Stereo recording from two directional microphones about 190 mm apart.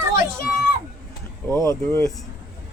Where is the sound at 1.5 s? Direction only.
15° left (ahead or behind).